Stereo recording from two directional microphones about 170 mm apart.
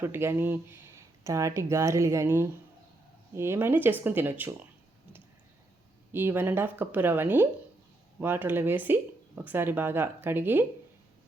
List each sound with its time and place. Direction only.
0.0 s speech: 15° right (ahead or behind)
6.1 s speech: 15° right (ahead or behind)